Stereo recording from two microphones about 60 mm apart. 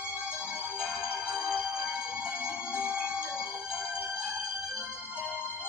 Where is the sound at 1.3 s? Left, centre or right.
Centre.